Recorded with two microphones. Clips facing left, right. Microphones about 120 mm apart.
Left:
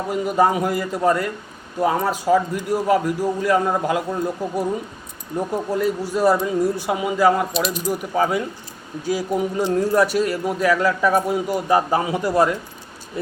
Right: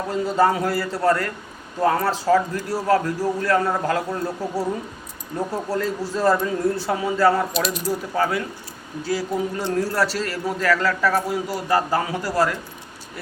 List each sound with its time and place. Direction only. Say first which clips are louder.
0.1 s a man's voice: left 1 dB; 15° left (ahead or behind)
7.5 s speech: left 1 dB; centre (ahead or behind)
7.9 s a man's voice: left 3 dB; 15° left (ahead or behind)